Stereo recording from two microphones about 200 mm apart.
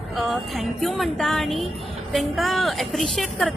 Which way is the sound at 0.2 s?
Centre (ahead or behind).